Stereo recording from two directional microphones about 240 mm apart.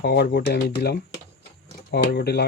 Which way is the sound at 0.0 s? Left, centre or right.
Left.